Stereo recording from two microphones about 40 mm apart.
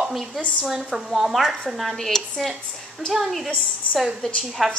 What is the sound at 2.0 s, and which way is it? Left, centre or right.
Speech, centre.